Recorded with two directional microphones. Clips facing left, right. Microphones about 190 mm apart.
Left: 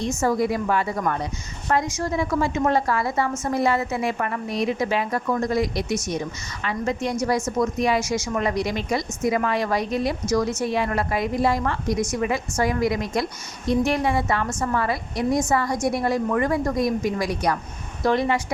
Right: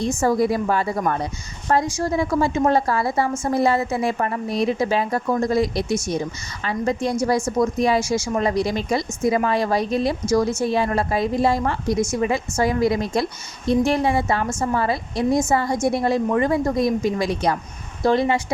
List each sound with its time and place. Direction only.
0.0 s a woman's voice: 30° right (ahead or behind)